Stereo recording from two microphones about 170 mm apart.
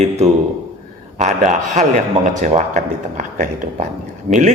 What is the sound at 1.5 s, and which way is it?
A man's voice, 45° right (ahead or behind).